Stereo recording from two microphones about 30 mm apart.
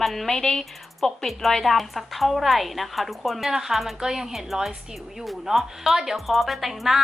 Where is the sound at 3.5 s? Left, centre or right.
Centre.